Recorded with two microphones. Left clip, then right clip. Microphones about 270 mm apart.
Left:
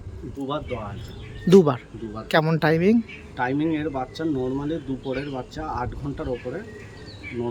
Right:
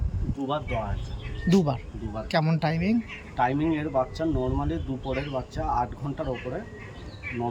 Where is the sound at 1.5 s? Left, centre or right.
Centre.